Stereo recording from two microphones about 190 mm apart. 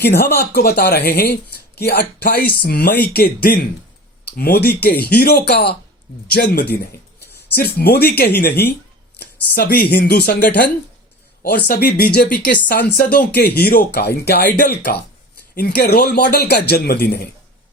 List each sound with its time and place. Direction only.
0.0 s speech: 60° left (ahead or behind)